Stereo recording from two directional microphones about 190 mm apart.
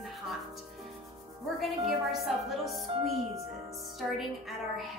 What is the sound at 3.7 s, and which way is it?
Speech, 15° right (ahead or behind).